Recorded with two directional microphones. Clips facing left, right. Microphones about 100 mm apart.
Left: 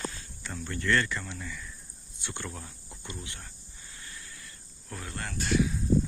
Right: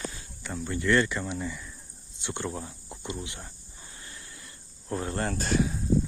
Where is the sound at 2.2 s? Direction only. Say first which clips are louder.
Right 6 dB; 20° right (ahead or behind).